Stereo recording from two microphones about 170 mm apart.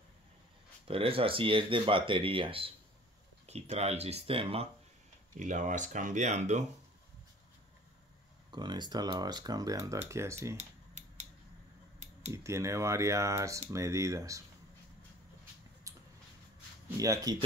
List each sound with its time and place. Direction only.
0.8 s speech: 35° right (ahead or behind)
5.4 s speech: 45° right (ahead or behind)
8.5 s speech: 25° right (ahead or behind)
10.6 s a sound: 45° right (ahead or behind)
12.3 s speech: 15° right (ahead or behind)
15.9 s vehicle: 20° right (ahead or behind)
16.9 s speech: 20° right (ahead or behind)